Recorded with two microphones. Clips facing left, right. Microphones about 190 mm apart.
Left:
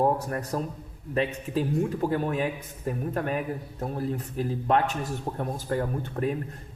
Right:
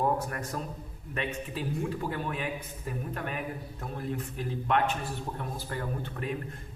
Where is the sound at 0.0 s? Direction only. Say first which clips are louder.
Left 4 dB; 35° left (ahead or behind).